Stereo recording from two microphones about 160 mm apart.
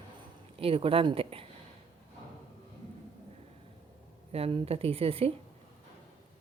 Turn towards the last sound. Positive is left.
turn(degrees=-35)  # may be behind; listen again after turning